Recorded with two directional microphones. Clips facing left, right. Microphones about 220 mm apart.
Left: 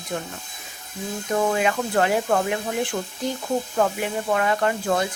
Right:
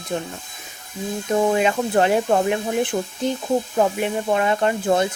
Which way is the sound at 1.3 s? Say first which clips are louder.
Right 3 dB; 25° right (ahead or behind).